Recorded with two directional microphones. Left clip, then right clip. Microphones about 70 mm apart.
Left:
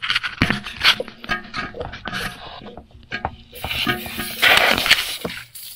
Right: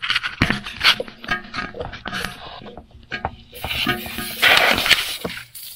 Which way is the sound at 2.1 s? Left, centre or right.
Right.